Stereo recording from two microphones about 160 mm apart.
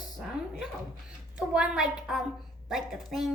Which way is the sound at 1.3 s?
5° right (ahead or behind).